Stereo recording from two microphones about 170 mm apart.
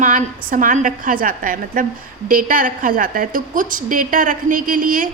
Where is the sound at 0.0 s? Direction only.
50° right (ahead or behind).